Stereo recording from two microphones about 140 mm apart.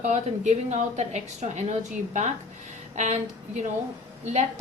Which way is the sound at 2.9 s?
55° right (ahead or behind).